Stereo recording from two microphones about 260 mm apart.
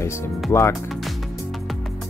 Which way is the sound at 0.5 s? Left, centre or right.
Centre.